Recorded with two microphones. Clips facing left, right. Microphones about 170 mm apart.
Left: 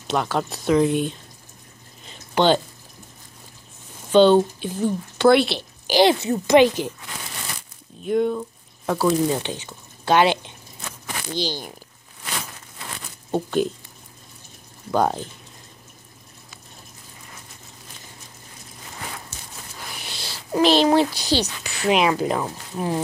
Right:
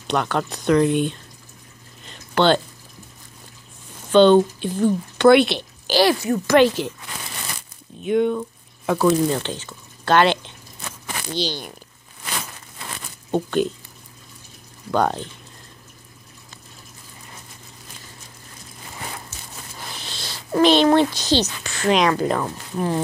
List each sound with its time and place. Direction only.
0.1 s speech: 5° left (ahead or behind)
2.0 s a sound: 10° left (ahead or behind)
4.1 s speech: 10° left (ahead or behind)
5.9 s speech: 20° left (ahead or behind)
8.1 s speech: 5° left (ahead or behind)
13.3 s speech: 10° left (ahead or behind)
14.9 s speech: 10° left (ahead or behind)
20.0 s speech: 10° left (ahead or behind)